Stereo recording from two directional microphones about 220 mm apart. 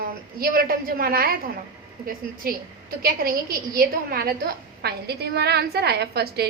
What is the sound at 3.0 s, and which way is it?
A woman's voice, 40° right (ahead or behind).